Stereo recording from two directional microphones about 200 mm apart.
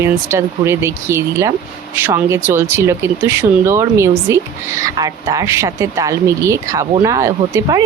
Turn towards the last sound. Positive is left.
turn(degrees=-15)  # may be behind; listen again after turning